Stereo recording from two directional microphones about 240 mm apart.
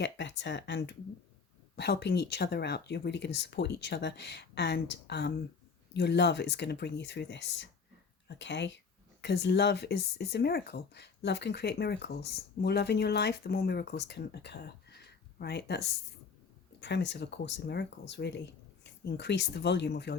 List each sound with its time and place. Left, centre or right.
0.0 s speech: left